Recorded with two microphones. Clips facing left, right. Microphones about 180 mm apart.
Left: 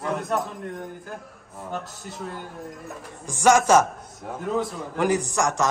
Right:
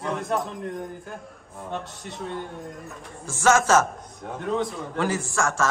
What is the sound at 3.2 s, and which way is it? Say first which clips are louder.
Speech: left 2 dB; 15° left (ahead or behind).